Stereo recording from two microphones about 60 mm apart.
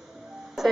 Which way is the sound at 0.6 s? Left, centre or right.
Centre.